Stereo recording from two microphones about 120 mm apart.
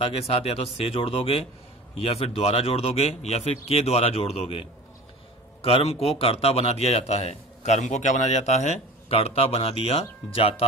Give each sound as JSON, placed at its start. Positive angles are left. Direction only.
{"t": 0.3, "sound": "a man's voice", "side_deg": 55}